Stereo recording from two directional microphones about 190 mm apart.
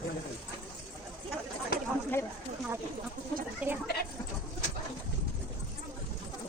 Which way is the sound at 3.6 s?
5° right (ahead or behind).